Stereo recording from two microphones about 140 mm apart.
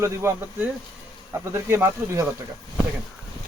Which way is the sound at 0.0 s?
15° right (ahead or behind).